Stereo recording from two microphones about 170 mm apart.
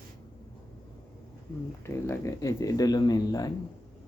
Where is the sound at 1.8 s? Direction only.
15° left (ahead or behind).